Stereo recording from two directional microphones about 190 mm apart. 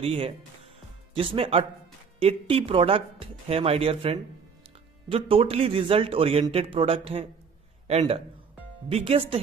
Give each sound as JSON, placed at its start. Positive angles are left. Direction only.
{"t": 0.0, "sound": "a man's voice", "side_deg": -30}